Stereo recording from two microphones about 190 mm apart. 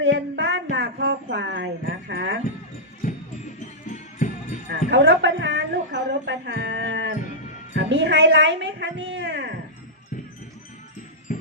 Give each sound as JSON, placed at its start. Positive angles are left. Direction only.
{"t": 0.0, "sound": "a sound", "side_deg": -70}
{"t": 3.8, "sound": "music", "side_deg": 40}
{"t": 4.9, "sound": "music", "side_deg": -65}
{"t": 7.8, "sound": "a woman's voice", "side_deg": -70}
{"t": 11.3, "sound": "music", "side_deg": 40}